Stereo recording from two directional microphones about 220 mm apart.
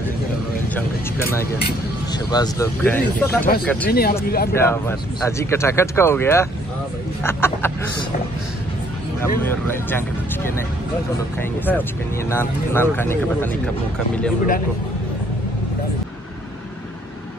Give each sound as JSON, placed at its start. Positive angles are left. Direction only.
{"t": 2.1, "sound": "speech", "side_deg": 15}
{"t": 3.9, "sound": "speech", "side_deg": 45}
{"t": 4.5, "sound": "speech", "side_deg": 10}
{"t": 9.2, "sound": "speech", "side_deg": 10}
{"t": 12.3, "sound": "speech", "side_deg": 10}